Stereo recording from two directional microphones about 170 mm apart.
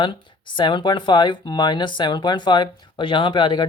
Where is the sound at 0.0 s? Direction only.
30° left (ahead or behind).